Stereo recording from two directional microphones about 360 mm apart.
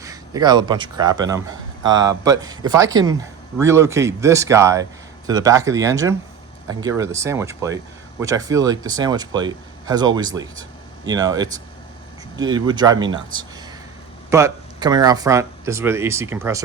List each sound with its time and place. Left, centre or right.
0.0 s speech: centre
14.3 s speech: centre